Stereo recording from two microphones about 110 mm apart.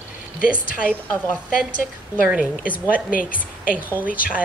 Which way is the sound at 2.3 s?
15° right (ahead or behind).